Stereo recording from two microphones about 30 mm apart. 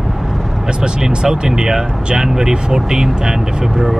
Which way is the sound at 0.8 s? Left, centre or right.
Right.